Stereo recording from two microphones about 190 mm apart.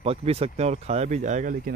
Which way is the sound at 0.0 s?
30° right (ahead or behind).